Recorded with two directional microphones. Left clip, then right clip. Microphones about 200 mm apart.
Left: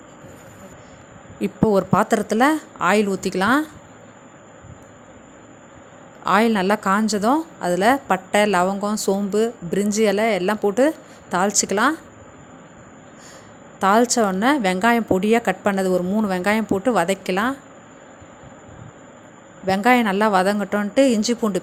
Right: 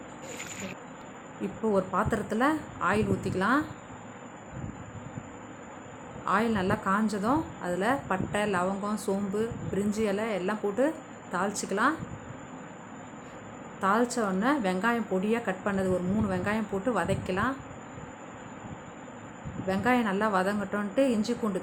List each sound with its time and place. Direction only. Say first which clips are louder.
1.4 s a woman's voice: left 9 dB; 40° left (ahead or behind)
6.2 s a woman's voice: left 10 dB; 40° left (ahead or behind)
13.7 s a woman's voice: left 10 dB; 40° left (ahead or behind)
19.6 s a woman's voice: left 10 dB; 40° left (ahead or behind)